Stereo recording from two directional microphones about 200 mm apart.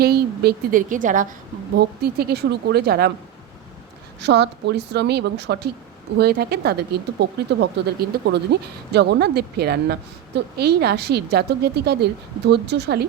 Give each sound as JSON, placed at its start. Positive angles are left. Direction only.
{"t": 0.0, "sound": "a woman's voice", "side_deg": -50}
{"t": 1.7, "sound": "speech", "side_deg": -50}
{"t": 4.2, "sound": "speech", "side_deg": -55}